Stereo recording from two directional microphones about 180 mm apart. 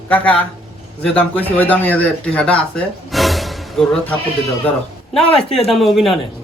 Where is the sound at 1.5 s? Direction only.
10° left (ahead or behind).